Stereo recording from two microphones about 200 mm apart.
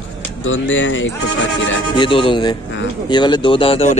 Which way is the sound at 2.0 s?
25° left (ahead or behind).